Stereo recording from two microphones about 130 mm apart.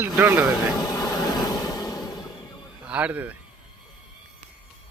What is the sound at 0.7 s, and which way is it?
Vehicle, 30° left (ahead or behind).